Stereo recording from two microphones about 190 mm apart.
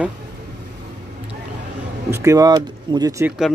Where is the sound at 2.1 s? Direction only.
15° right (ahead or behind).